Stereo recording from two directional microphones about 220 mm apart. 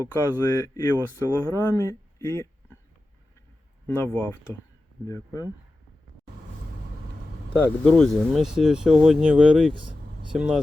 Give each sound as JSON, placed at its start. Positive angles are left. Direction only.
{"t": 0.0, "sound": "speech", "side_deg": 15}
{"t": 3.8, "sound": "speech", "side_deg": 10}
{"t": 7.6, "sound": "speech", "side_deg": 5}